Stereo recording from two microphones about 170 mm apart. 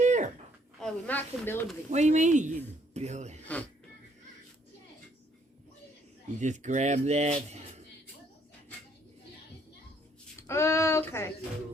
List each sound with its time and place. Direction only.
0.0 s a sound: 45° right (ahead or behind)
0.8 s speech: 5° left (ahead or behind)
1.9 s speech: 45° right (ahead or behind)
6.4 s speech: 45° right (ahead or behind)
10.4 s speech: 15° left (ahead or behind)